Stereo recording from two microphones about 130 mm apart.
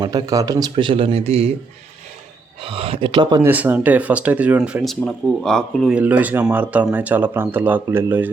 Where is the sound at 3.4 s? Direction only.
15° right (ahead or behind).